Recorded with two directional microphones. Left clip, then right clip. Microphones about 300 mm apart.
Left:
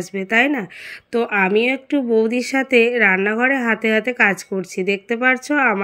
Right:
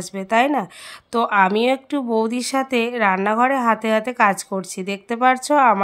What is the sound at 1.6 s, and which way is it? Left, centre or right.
Speech, centre.